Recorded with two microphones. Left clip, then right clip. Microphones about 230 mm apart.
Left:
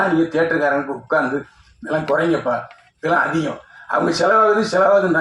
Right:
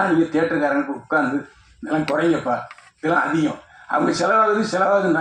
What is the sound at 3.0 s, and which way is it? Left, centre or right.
Speech, left.